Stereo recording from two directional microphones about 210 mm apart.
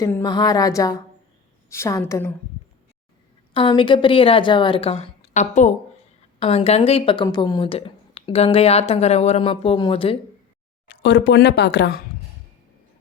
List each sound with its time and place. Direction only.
0.0 s a woman's voice: 15° left (ahead or behind)
3.5 s speech: 25° left (ahead or behind)
10.8 s speech: 55° left (ahead or behind)